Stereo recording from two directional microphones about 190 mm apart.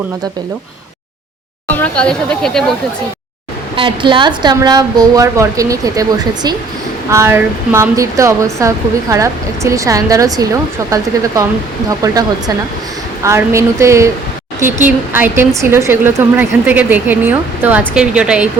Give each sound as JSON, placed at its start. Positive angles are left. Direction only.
{"t": 1.8, "sound": "speech", "side_deg": 5}
{"t": 3.8, "sound": "a woman's voice", "side_deg": -25}
{"t": 13.2, "sound": "speech", "side_deg": -15}
{"t": 15.1, "sound": "speech", "side_deg": -10}